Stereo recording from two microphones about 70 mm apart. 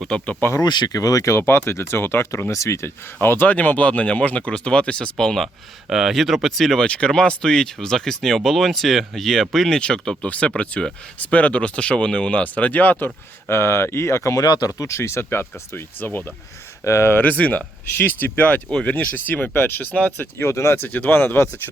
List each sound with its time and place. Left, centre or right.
0.1 s speech: centre
0.6 s speech: left
3.2 s speech: left
13.5 s speech: left
14.4 s speech: left
14.7 s speech: left
16.8 s speech: left
20.5 s speech: left